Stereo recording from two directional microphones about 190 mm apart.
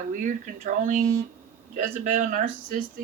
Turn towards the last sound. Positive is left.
turn(degrees=-45)  # may be behind; listen again after turning